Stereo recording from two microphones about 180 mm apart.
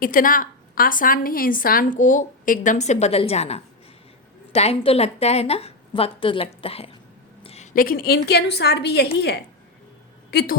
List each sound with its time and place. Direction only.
0.0 s a woman's voice: 50° left (ahead or behind)